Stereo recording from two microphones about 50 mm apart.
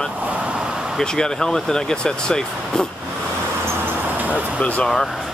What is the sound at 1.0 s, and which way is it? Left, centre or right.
Speech, centre.